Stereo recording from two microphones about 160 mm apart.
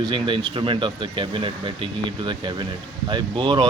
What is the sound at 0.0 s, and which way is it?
Speech, 30° right (ahead or behind).